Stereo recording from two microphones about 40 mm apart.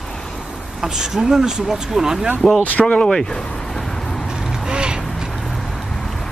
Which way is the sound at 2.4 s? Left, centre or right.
Centre.